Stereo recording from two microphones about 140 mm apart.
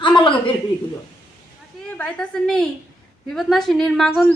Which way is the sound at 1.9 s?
5° left (ahead or behind).